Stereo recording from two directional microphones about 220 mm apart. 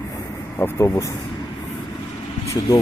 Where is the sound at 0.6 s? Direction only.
10° left (ahead or behind).